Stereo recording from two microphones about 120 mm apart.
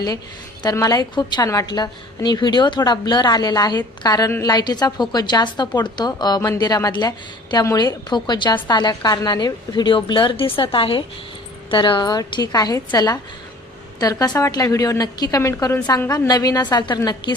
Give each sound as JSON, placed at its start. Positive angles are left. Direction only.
{"t": 0.6, "sound": "a woman's voice", "side_deg": 30}
{"t": 14.0, "sound": "a woman's voice", "side_deg": 30}